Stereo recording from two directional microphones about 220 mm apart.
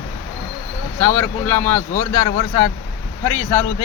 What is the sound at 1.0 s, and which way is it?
Speech, 10° left (ahead or behind).